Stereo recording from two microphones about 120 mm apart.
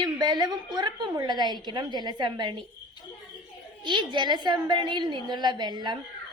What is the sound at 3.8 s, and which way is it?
A woman's voice, 40° right (ahead or behind).